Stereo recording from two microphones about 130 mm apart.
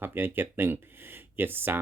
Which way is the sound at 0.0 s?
15° right (ahead or behind).